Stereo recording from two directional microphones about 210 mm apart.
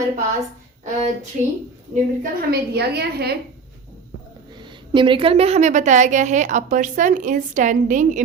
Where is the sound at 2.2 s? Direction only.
45° right (ahead or behind).